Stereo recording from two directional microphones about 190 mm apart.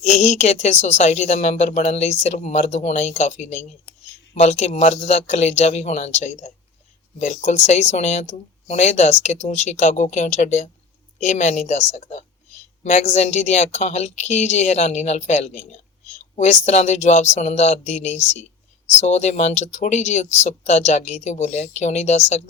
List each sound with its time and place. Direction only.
0.0 s speech: 35° left (ahead or behind)